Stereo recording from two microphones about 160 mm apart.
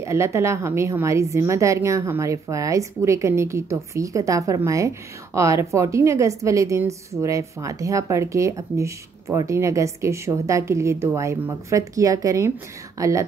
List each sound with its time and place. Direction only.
0.0 s a woman's voice: 20° right (ahead or behind)